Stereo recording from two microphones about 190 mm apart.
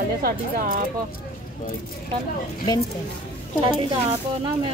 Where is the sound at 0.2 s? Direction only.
50° right (ahead or behind).